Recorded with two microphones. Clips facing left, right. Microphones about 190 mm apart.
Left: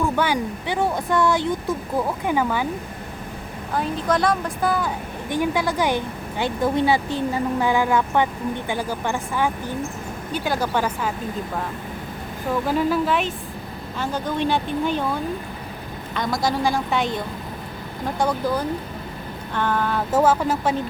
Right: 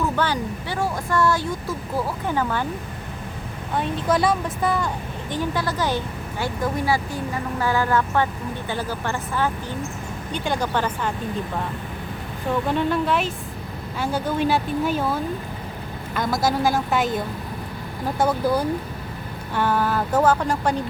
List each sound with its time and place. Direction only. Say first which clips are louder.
0.0 s speech: left 2 dB; 10° left (ahead or behind)
3.8 s speech: even; centre (ahead or behind)
5.3 s speech: left 3 dB; 15° left (ahead or behind)
12.6 s speech: left 2 dB; 5° left (ahead or behind)
18.2 s speech: right 2 dB; 5° right (ahead or behind)
20.1 s speech: left 2 dB; 5° left (ahead or behind)